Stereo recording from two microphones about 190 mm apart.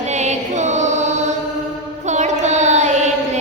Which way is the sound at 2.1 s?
35° right (ahead or behind).